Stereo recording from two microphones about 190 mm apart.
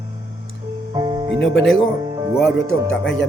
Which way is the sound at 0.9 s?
20° right (ahead or behind).